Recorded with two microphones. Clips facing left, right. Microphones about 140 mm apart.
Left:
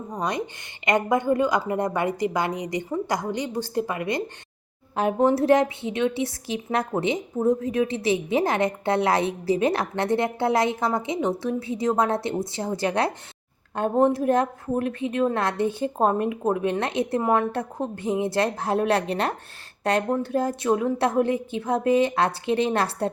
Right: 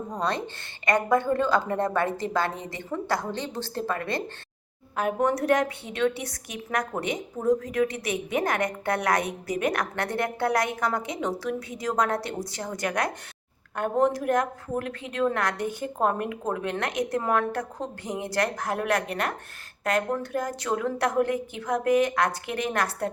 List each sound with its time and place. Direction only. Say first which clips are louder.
0.1 s a woman's voice: left 2 dB; 15° left (ahead or behind)
4.9 s a woman's voice: left 4 dB; 30° left (ahead or behind)